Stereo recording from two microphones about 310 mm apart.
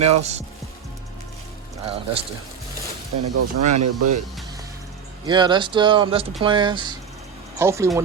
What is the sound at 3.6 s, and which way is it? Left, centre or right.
Speech, right.